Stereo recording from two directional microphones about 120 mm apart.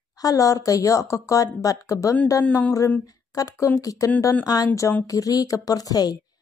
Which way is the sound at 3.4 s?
30° left (ahead or behind).